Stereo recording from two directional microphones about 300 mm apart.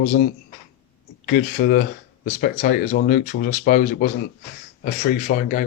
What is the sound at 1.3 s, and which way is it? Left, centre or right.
Speech, left.